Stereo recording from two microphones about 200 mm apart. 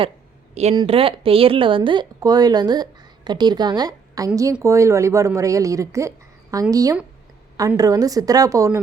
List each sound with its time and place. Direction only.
0.5 s speech: 30° right (ahead or behind); by 8.8 s 15° right (ahead or behind)